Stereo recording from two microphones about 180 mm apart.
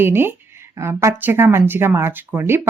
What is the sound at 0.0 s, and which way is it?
Speech, 15° right (ahead or behind).